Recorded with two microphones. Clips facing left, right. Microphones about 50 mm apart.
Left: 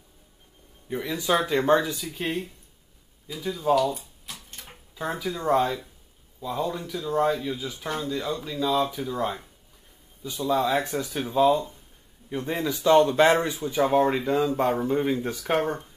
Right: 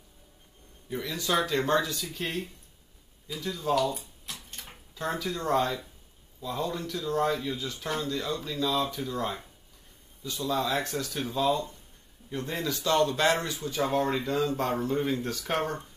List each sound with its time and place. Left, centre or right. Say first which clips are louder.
0.8 s speech: left 5 dB; centre
4.5 s a sound: left 1 dB; centre
4.9 s speech: left 2 dB; centre